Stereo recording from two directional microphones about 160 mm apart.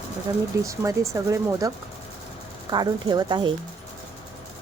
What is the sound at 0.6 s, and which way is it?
Speech, 20° right (ahead or behind).